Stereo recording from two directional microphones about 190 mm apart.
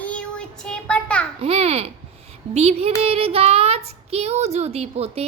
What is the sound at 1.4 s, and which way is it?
Child singing, 30° right (ahead or behind).